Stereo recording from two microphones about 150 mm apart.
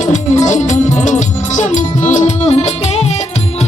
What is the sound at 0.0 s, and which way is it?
Music, 55° left (ahead or behind).